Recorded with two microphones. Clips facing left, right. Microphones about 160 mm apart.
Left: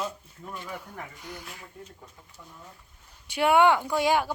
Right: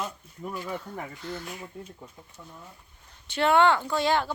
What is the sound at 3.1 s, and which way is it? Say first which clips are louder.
Speech: even; 10° left (ahead or behind).